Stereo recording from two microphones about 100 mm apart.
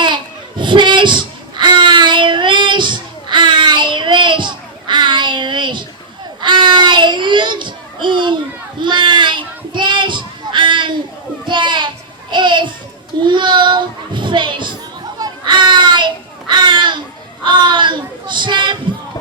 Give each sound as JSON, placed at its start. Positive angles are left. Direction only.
{"t": 0.0, "sound": "a sound", "side_deg": -50}
{"t": 6.4, "sound": "child singing", "side_deg": -50}
{"t": 11.4, "sound": "children playing", "side_deg": -50}
{"t": 12.3, "sound": "babbling", "side_deg": -50}
{"t": 13.2, "sound": "children playing", "side_deg": -50}
{"t": 15.2, "sound": "a sound", "side_deg": -50}